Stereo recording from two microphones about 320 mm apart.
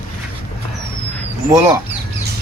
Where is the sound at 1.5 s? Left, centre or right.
Centre.